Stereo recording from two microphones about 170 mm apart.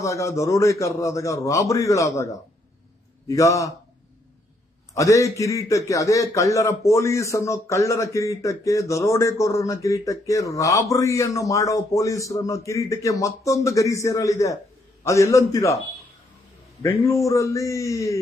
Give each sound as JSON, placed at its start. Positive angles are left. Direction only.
{"t": 0.0, "sound": "a man's voice", "side_deg": 20}
{"t": 4.9, "sound": "a man's voice", "side_deg": 20}
{"t": 16.8, "sound": "a man's voice", "side_deg": 20}